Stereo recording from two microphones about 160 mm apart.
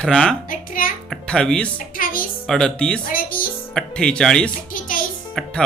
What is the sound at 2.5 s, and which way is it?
Speech, 5° left (ahead or behind).